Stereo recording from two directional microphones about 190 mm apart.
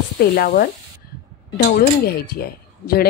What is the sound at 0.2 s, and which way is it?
Speech, 55° left (ahead or behind).